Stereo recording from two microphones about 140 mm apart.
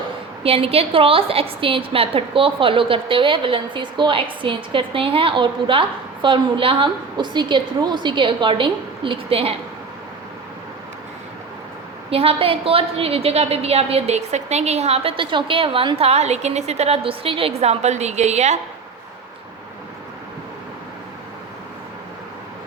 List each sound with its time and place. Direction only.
0.4 s a woman's voice: 45° right (ahead or behind)
12.1 s a woman's voice: 45° right (ahead or behind)